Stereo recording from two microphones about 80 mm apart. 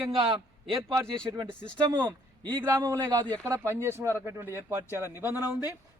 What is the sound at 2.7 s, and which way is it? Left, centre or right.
Speech, right.